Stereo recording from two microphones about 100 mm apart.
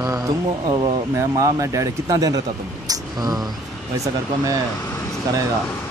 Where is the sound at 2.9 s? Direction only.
35° right (ahead or behind).